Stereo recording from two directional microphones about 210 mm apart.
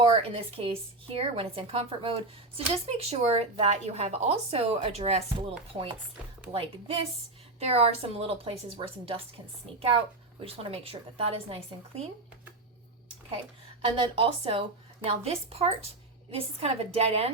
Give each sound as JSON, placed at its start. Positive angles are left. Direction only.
{"t": 0.0, "sound": "speech", "side_deg": -25}
{"t": 10.4, "sound": "speech", "side_deg": -25}
{"t": 13.9, "sound": "speech", "side_deg": -25}